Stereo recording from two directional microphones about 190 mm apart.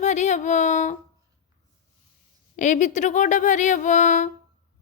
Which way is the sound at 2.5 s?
40° left (ahead or behind).